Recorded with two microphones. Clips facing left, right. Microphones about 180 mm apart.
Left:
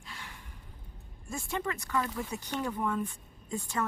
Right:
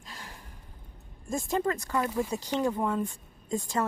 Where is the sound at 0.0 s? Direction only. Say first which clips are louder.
Right 2 dB; 40° right (ahead or behind).